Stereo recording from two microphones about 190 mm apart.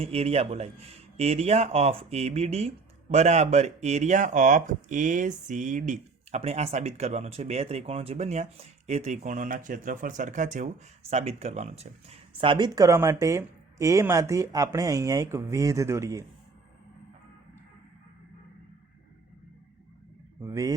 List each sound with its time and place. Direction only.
0.0 s a man's voice: 30° right (ahead or behind); by 16.2 s 15° right (ahead or behind)
20.4 s speech: 15° right (ahead or behind)